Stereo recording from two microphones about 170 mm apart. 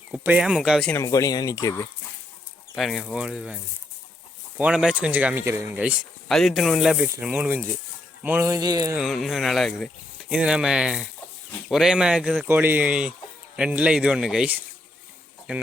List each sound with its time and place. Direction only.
0.1 s speech: 5° right (ahead or behind)
0.9 s speech: 15° left (ahead or behind)
2.7 s speech: centre (ahead or behind); by 9.0 s 20° right (ahead or behind)
9.0 s speech: centre (ahead or behind)
12.5 s speech: 10° right (ahead or behind)